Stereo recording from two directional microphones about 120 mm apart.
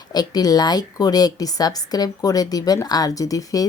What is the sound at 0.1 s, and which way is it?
A woman's voice, 35° left (ahead or behind).